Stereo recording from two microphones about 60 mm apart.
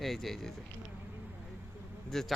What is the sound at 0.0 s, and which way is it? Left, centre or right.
Speech, centre.